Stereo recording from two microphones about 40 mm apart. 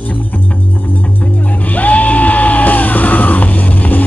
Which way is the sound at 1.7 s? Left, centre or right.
Left.